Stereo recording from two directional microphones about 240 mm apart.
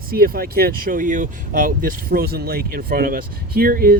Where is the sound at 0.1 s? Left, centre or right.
Right.